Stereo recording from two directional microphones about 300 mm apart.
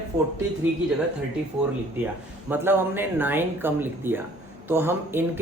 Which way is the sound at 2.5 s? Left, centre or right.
Centre.